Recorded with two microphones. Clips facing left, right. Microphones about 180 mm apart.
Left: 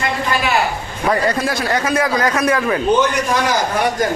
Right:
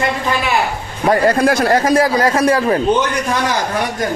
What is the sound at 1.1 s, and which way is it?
Speech, 50° right (ahead or behind).